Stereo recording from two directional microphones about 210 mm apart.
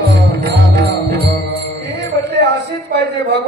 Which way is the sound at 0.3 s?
50° right (ahead or behind).